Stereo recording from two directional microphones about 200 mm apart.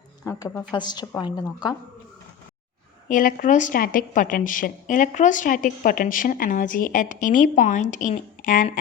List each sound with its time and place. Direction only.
0.3 s a woman's voice: 15° left (ahead or behind)
3.1 s speech: 40° left (ahead or behind)